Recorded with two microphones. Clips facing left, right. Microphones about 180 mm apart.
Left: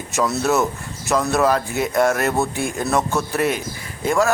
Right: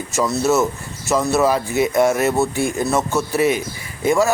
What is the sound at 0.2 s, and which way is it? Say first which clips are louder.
Speech: right 2 dB; centre (ahead or behind).